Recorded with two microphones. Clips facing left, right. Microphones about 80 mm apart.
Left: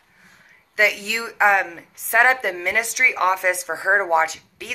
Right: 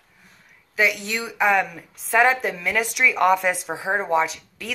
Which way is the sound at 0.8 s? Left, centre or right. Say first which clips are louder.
Left 1 dB; left.